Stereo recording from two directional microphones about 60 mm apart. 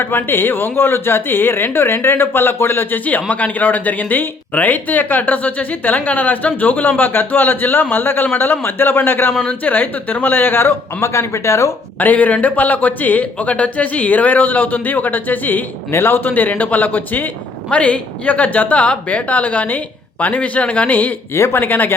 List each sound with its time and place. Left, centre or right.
0.0 s speech: left
3.1 s speech: left
11.9 s speech: left
15.9 s speech: left
16.3 s speech: left
17.7 s speech: left
21.3 s speech: left